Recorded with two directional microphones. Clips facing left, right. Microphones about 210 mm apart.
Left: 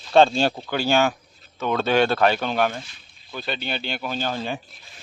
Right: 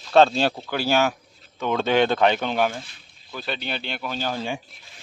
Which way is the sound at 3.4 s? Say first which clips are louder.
Left 1 dB; centre (ahead or behind).